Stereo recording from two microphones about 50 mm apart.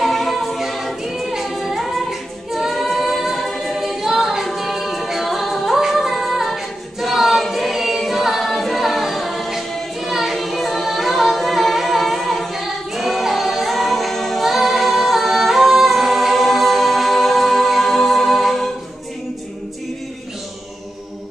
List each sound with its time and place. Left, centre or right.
0.0 s a capella: centre